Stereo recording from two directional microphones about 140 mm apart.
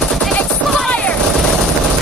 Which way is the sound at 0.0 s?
5° left (ahead or behind).